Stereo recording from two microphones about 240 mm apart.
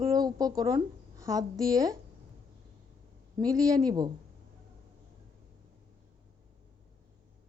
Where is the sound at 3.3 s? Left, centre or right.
Centre.